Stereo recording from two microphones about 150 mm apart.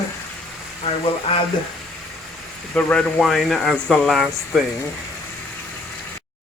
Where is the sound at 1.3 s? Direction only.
40° left (ahead or behind).